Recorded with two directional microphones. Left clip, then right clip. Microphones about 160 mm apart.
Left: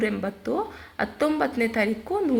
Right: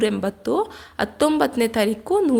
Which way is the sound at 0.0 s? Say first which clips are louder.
Right 5 dB; 40° right (ahead or behind).